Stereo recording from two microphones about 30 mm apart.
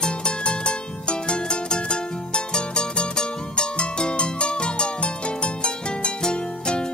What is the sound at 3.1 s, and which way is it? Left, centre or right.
Music, left.